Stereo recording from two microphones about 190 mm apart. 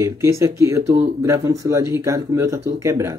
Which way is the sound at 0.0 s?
15° right (ahead or behind).